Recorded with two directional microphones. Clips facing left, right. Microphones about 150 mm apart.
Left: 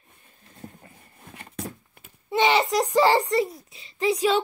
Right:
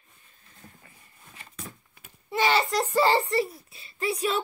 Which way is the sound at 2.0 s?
20° left (ahead or behind).